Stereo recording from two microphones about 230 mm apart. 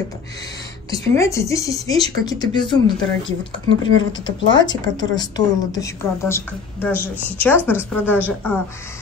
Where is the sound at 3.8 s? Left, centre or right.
Left.